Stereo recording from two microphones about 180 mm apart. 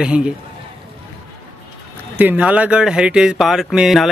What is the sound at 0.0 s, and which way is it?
Speech, 5° right (ahead or behind).